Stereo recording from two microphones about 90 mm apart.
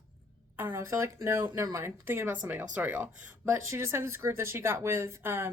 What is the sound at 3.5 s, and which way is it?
Speech, 30° right (ahead or behind).